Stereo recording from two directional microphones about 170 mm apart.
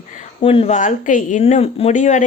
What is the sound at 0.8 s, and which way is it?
Speech, 50° left (ahead or behind).